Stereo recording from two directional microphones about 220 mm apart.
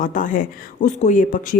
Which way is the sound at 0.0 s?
35° left (ahead or behind).